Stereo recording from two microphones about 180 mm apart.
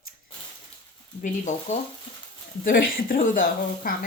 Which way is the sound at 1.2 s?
45° left (ahead or behind).